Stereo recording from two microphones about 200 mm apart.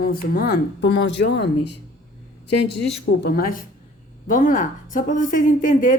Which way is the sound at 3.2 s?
50° left (ahead or behind).